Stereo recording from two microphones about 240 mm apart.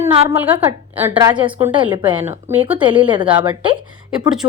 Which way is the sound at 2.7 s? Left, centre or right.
Right.